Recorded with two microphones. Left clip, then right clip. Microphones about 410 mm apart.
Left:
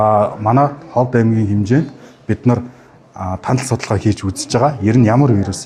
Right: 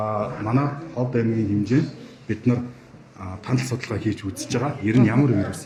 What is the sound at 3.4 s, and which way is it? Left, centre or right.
Speech, left.